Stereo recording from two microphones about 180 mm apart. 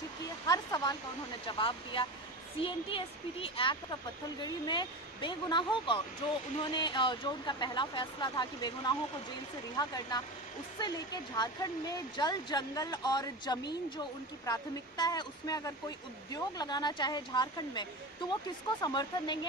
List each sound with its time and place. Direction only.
0.5 s speech: 20° left (ahead or behind)
11.3 s speech: 20° left (ahead or behind)